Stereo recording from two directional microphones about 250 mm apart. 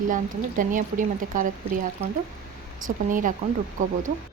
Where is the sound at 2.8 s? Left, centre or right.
Right.